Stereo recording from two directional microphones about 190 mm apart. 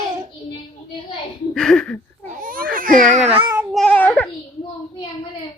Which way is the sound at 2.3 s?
45° right (ahead or behind).